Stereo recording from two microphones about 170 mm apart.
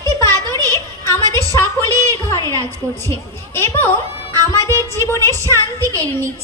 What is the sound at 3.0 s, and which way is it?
Speech, 15° left (ahead or behind).